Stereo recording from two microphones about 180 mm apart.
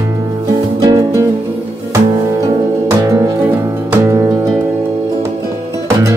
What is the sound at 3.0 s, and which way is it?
Music, 15° right (ahead or behind).